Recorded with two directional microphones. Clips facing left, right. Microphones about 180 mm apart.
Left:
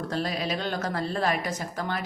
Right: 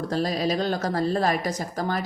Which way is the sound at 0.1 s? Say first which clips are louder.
Right 6 dB; 40° right (ahead or behind).